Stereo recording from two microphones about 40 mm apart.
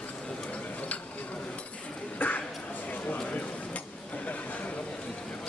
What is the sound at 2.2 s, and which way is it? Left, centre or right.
Dishes, left.